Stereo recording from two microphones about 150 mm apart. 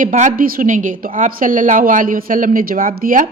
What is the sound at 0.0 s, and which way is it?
A woman's voice, 60° right (ahead or behind).